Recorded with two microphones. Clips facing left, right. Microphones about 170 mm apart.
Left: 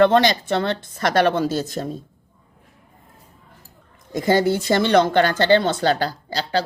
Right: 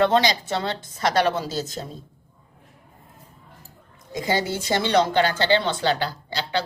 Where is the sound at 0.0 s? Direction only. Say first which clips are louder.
Left 4 dB; 55° left (ahead or behind).